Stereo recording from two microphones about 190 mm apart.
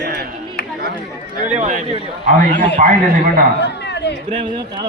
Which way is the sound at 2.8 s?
40° right (ahead or behind).